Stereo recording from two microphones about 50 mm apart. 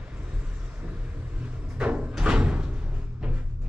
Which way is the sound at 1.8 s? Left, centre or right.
Right.